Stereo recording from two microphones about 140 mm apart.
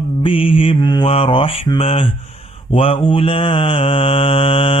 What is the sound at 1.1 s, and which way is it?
Mantra, 40° left (ahead or behind).